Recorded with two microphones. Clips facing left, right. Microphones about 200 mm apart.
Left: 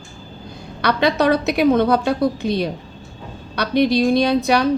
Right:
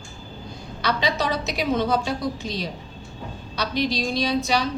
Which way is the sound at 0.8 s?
60° left (ahead or behind).